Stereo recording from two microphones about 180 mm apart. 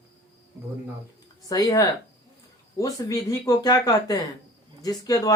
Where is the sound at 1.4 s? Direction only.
20° left (ahead or behind).